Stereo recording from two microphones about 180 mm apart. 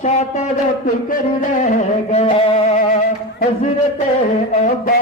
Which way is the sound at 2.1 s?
35° left (ahead or behind).